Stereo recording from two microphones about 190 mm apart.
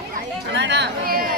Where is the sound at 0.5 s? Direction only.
65° right (ahead or behind).